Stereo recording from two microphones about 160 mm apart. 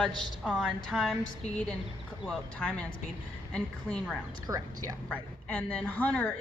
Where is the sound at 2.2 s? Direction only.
5° left (ahead or behind).